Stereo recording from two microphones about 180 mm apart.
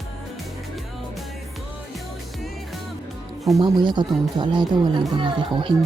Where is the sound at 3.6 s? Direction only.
25° right (ahead or behind).